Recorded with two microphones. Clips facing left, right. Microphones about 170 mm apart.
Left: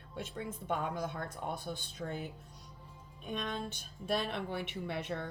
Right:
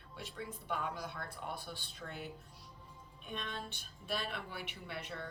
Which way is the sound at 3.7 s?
45° left (ahead or behind).